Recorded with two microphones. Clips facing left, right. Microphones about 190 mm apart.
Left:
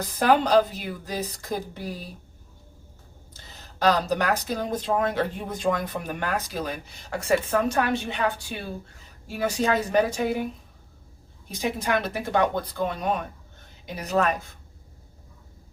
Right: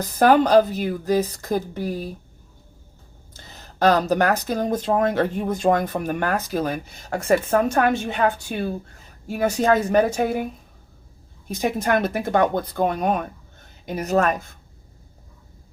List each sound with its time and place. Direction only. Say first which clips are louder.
0.0 s speech: right 5 dB; 45° right (ahead or behind)
3.8 s speech: right 5 dB; 50° right (ahead or behind)
11.4 s speech: right 5 dB; 50° right (ahead or behind)